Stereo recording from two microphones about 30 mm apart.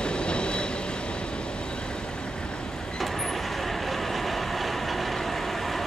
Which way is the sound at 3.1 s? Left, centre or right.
Centre.